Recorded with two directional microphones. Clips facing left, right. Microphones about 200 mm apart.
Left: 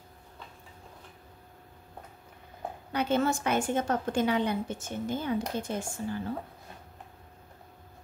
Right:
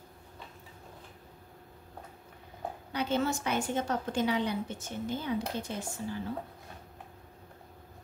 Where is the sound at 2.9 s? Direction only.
55° left (ahead or behind).